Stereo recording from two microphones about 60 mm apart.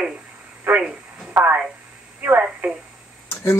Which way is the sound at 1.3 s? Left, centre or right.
Right.